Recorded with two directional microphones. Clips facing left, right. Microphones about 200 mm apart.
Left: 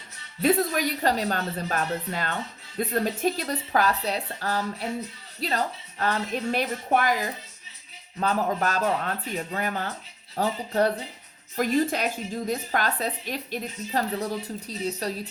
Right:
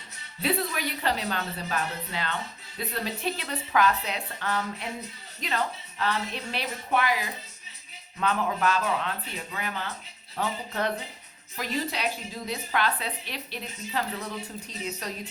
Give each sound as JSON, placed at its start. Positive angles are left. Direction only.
{"t": 0.4, "sound": "a woman's voice", "side_deg": 45}
{"t": 11.5, "sound": "a woman's voice", "side_deg": 50}